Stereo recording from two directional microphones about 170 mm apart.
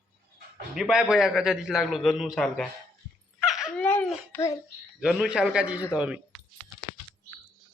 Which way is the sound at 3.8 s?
10° left (ahead or behind).